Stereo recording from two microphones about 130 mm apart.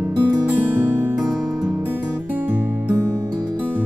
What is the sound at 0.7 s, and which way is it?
Music, 15° right (ahead or behind).